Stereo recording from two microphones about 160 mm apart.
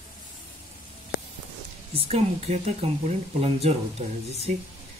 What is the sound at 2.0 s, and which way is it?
Speech, 40° right (ahead or behind).